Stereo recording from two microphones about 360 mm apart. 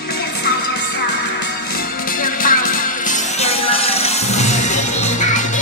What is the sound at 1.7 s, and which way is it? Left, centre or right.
Music, left.